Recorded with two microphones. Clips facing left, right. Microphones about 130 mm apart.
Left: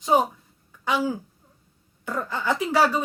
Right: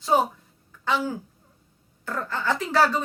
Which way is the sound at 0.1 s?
15° left (ahead or behind).